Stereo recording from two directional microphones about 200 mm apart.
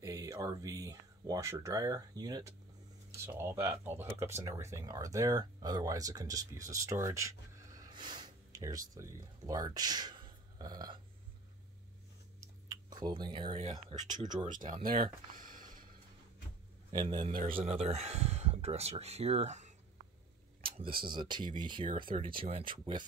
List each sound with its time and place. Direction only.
0.0 s speech: 15° right (ahead or behind)
12.4 s speech: 20° right (ahead or behind)
14.4 s speech: 40° right (ahead or behind)
14.9 s speech: 25° right (ahead or behind)
15.3 s a sound: 45° right (ahead or behind)
16.9 s speech: 25° right (ahead or behind)